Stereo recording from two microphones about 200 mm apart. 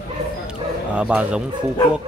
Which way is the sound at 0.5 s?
5° right (ahead or behind).